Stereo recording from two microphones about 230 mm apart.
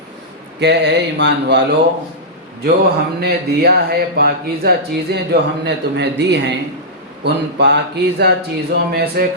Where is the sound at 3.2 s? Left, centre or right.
Right.